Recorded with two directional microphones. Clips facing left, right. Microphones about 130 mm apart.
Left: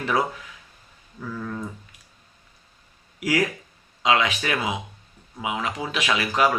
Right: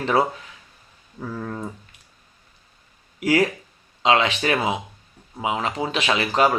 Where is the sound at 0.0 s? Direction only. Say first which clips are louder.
Right 4 dB; 30° right (ahead or behind).